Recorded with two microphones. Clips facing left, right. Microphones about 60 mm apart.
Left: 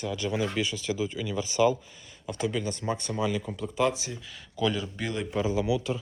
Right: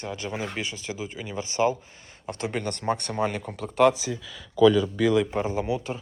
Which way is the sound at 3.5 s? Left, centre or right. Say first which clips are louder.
Right 6 dB; right.